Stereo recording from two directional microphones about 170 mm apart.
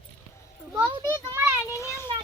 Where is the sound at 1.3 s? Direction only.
15° right (ahead or behind).